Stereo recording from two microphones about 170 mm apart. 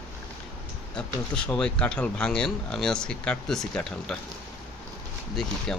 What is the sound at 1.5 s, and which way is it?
Speech, 5° left (ahead or behind).